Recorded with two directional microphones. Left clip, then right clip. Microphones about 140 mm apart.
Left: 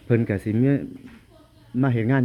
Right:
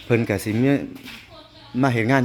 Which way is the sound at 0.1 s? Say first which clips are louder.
Right 2 dB; 20° left (ahead or behind).